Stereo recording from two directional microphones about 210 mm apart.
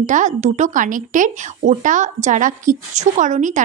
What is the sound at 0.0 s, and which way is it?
A woman's voice, 35° right (ahead or behind).